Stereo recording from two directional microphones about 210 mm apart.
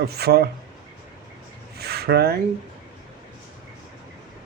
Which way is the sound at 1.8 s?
50° right (ahead or behind).